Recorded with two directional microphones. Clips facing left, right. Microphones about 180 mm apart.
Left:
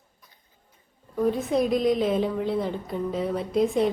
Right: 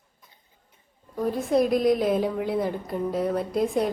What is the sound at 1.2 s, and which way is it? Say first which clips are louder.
A woman's voice: even; centre (ahead or behind).